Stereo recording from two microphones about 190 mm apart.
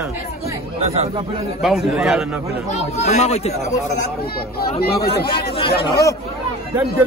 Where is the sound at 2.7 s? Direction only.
35° left (ahead or behind).